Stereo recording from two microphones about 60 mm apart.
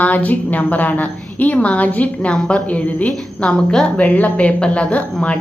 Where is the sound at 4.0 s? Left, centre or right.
Left.